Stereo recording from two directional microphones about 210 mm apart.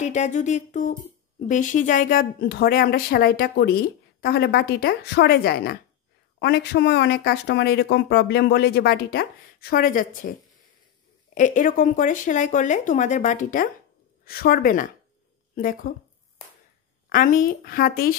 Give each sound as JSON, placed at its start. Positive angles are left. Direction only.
{"t": 0.0, "sound": "speech", "side_deg": 35}
{"t": 11.3, "sound": "speech", "side_deg": 40}
{"t": 17.1, "sound": "speech", "side_deg": 40}